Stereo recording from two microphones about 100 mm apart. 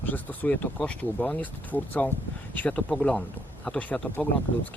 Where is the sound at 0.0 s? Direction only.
15° left (ahead or behind).